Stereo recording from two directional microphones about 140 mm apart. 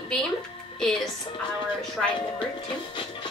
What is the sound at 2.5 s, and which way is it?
Speech, 35° left (ahead or behind).